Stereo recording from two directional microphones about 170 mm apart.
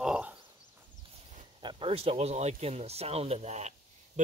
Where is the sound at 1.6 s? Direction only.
30° right (ahead or behind).